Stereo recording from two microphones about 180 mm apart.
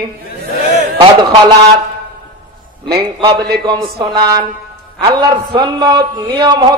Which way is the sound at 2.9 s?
25° right (ahead or behind).